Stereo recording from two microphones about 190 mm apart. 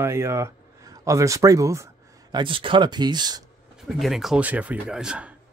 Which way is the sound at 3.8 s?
Centre (ahead or behind).